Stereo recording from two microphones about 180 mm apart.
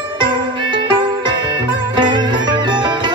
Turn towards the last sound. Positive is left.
turn(degrees=-25)  # may be behind; listen again after turning